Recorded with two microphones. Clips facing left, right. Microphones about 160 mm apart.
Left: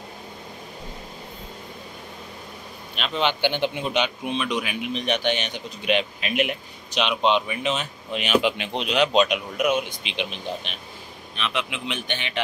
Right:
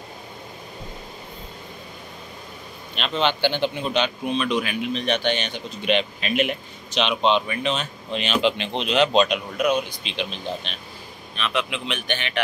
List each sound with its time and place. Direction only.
3.0 s a man's voice: 10° left (ahead or behind)